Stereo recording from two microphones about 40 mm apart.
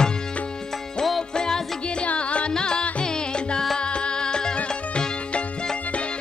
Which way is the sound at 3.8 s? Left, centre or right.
Left.